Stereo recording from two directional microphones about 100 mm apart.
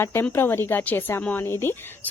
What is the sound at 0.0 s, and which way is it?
A woman's voice, 20° left (ahead or behind).